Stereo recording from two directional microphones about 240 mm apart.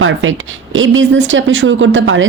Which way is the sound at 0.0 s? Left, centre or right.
Right.